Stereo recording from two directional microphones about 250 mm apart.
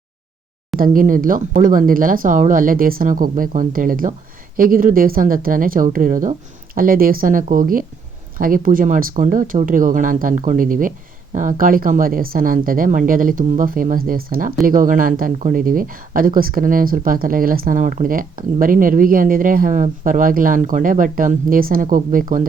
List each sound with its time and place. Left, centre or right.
0.8 s speech: right